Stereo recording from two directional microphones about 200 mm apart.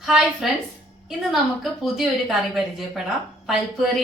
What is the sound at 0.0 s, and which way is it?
A woman's voice, centre (ahead or behind).